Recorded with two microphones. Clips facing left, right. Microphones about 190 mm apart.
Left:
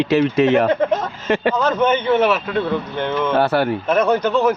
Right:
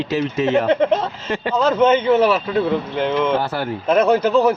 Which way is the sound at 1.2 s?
65° left (ahead or behind).